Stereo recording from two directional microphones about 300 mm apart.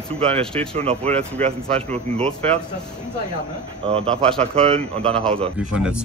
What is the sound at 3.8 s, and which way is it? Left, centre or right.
Speech, centre.